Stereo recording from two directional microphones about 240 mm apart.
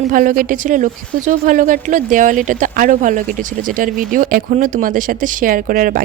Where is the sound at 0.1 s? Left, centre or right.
Right.